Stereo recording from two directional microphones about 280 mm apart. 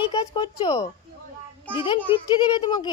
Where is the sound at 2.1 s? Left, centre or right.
Centre.